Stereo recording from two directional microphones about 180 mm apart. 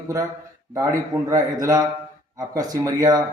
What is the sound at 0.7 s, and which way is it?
A man's voice, 20° right (ahead or behind).